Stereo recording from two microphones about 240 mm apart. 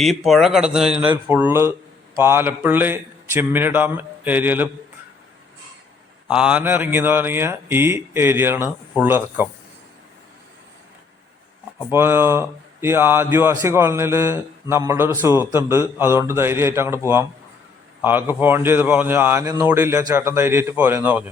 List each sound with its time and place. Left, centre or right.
0.0 s a man's voice: centre
6.3 s speech: centre
11.9 s speech: centre
18.0 s speech: centre